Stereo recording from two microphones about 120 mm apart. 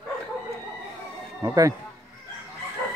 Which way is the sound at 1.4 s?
30° right (ahead or behind).